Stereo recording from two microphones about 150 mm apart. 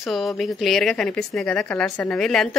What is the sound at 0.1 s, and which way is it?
Speech, centre (ahead or behind).